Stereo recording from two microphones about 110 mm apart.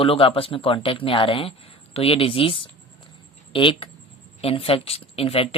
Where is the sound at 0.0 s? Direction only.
55° left (ahead or behind).